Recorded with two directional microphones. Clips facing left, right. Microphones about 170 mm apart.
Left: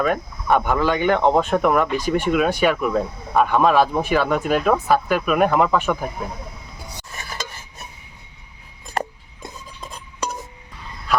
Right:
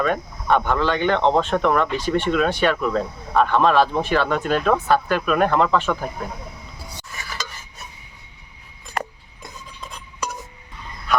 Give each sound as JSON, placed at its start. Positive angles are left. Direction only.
{"t": 0.0, "sound": "speech", "side_deg": 5}
{"t": 7.1, "sound": "stir", "side_deg": 30}
{"t": 9.0, "sound": "cutlery", "side_deg": 30}